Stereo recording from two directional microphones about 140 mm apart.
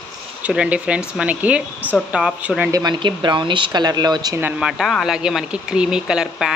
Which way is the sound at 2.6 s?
25° right (ahead or behind).